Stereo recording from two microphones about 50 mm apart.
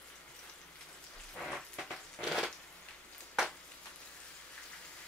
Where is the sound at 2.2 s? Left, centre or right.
Centre.